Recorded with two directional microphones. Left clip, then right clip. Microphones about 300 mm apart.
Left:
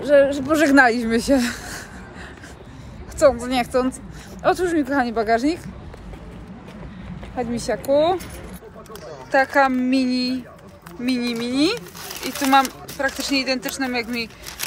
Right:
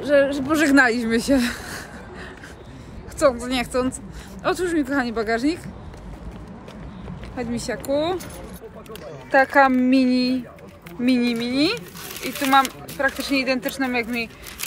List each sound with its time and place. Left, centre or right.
0.0 s speech: centre
3.2 s speech: centre
7.3 s speech: centre
9.3 s speech: centre
12.2 s speech: left
12.4 s speech: centre